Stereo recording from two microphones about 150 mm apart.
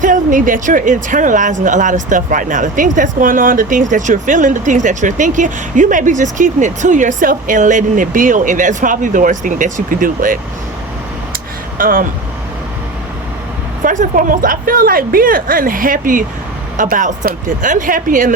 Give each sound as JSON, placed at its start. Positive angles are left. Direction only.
{"t": 0.0, "sound": "speech", "side_deg": -60}
{"t": 11.8, "sound": "a woman's voice", "side_deg": -70}
{"t": 13.8, "sound": "a woman's voice", "side_deg": -60}